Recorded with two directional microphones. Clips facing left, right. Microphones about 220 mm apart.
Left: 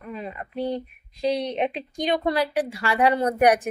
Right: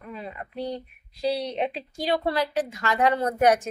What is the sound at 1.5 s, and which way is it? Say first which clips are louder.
Speech: left 2 dB; 15° left (ahead or behind).